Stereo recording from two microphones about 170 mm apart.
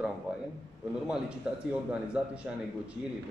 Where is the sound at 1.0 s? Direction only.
5° right (ahead or behind).